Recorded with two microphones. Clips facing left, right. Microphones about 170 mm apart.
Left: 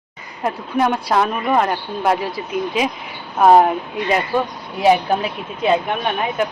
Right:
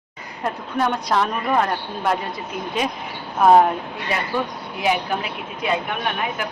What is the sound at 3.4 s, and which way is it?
Speech, 5° left (ahead or behind).